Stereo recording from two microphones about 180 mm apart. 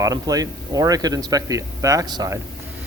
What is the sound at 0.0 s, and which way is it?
Speech, 20° right (ahead or behind).